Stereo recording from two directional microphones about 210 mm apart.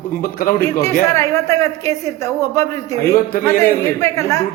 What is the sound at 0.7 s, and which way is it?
A woman's voice, 15° left (ahead or behind).